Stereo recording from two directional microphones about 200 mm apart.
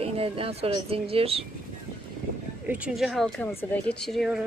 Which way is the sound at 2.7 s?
5° right (ahead or behind).